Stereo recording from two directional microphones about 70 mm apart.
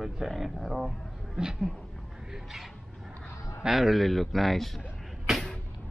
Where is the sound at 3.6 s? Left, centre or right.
Centre.